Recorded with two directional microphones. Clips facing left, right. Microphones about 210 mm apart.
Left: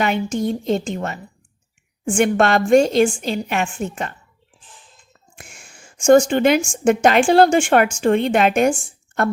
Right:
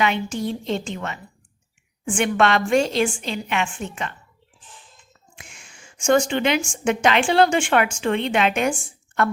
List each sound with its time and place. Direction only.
0.0 s a woman's voice: 45° left (ahead or behind)
5.4 s a woman's voice: 50° left (ahead or behind)